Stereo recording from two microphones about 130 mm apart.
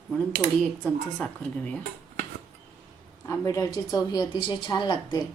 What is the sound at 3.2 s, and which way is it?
A woman's voice, 25° left (ahead or behind).